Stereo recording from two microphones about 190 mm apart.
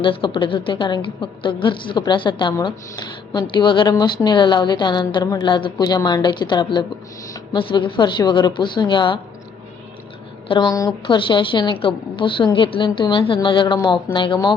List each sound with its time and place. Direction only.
0.0 s a woman's voice: 25° left (ahead or behind)
10.5 s a woman's voice: 20° left (ahead or behind)